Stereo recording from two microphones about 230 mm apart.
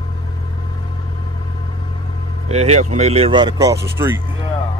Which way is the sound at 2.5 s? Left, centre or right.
Right.